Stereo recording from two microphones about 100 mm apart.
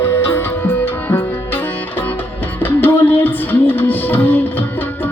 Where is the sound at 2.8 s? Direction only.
20° left (ahead or behind).